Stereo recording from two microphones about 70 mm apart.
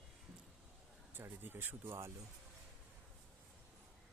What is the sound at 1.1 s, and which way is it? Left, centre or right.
Speech, right.